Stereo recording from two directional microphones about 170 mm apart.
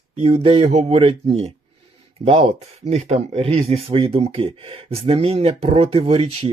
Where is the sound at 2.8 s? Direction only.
40° right (ahead or behind).